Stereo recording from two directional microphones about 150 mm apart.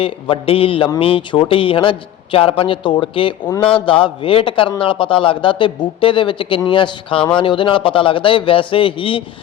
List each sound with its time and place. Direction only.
0.0 s a man's voice: 40° left (ahead or behind)